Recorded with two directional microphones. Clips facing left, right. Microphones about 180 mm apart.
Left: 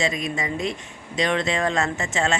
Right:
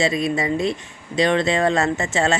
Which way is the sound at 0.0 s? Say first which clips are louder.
Right 5 dB; 35° right (ahead or behind).